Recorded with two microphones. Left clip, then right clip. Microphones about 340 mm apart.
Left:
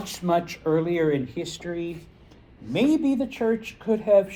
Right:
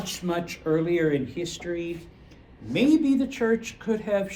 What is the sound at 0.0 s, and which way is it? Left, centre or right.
A woman's voice, centre.